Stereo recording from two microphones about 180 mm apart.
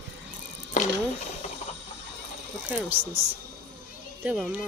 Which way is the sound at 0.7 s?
40° left (ahead or behind).